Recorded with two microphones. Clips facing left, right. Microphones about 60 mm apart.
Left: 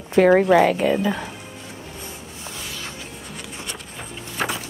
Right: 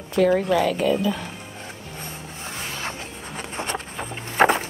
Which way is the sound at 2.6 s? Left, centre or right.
Right.